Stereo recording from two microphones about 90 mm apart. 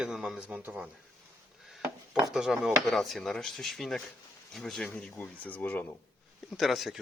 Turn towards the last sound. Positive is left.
turn(degrees=0)  # may be behind; listen again after turning